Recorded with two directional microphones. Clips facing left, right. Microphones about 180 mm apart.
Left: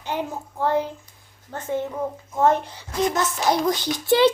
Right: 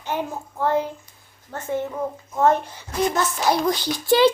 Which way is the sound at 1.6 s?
15° left (ahead or behind).